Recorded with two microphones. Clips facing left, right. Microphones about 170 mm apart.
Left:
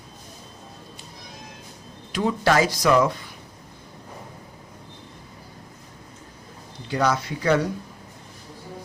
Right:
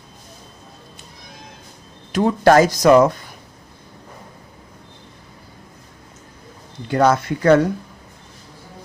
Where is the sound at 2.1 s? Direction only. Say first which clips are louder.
Right 7 dB; 45° right (ahead or behind).